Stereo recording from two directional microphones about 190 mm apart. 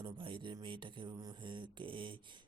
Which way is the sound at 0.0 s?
25° right (ahead or behind).